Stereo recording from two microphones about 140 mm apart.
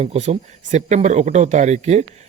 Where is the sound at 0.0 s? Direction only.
50° right (ahead or behind).